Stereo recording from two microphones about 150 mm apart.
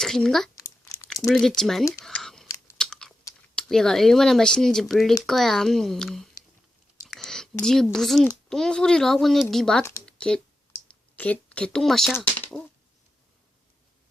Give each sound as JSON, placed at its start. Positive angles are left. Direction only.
{"t": 0.0, "sound": "speech", "side_deg": 5}
{"t": 0.5, "sound": "crumpling", "side_deg": 20}
{"t": 1.3, "sound": "speech", "side_deg": 5}
{"t": 2.0, "sound": "a sound", "side_deg": 0}
{"t": 2.7, "sound": "chewing", "side_deg": 5}
{"t": 3.5, "sound": "speech", "side_deg": 5}
{"t": 7.1, "sound": "a sound", "side_deg": 5}
{"t": 7.6, "sound": "speech", "side_deg": 5}
{"t": 10.1, "sound": "a sound", "side_deg": 5}
{"t": 11.2, "sound": "speech", "side_deg": 10}